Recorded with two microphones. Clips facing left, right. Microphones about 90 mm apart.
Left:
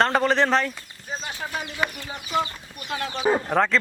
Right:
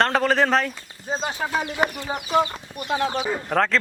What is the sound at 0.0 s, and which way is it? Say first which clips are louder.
Speech: right 1 dB; centre (ahead or behind).